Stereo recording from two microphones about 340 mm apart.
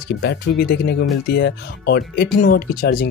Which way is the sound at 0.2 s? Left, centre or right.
Left.